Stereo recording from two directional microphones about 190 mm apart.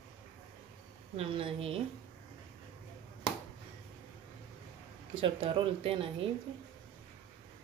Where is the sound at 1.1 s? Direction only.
30° right (ahead or behind).